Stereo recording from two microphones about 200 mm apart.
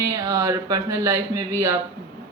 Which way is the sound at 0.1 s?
20° right (ahead or behind).